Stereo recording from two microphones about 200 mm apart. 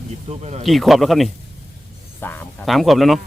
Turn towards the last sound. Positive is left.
turn(degrees=0)  # may be behind; listen again after turning